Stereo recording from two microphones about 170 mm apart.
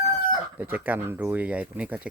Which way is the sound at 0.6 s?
10° right (ahead or behind).